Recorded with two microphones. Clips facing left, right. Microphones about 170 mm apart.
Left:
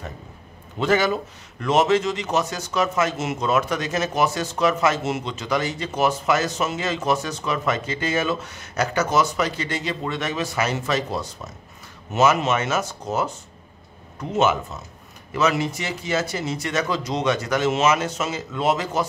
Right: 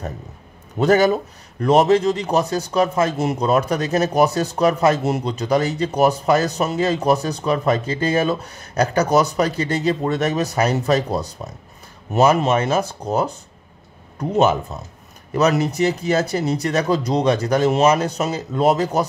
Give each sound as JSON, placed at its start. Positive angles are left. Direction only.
{"t": 0.7, "sound": "a man's voice", "side_deg": -40}
{"t": 14.3, "sound": "a man's voice", "side_deg": -35}